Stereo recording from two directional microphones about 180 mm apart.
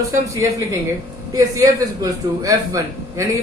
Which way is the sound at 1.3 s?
20° right (ahead or behind).